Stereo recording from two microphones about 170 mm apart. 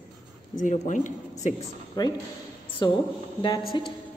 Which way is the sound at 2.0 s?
25° left (ahead or behind).